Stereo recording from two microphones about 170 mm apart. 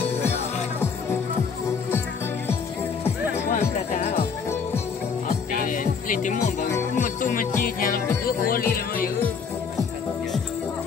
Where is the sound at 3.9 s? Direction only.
40° left (ahead or behind).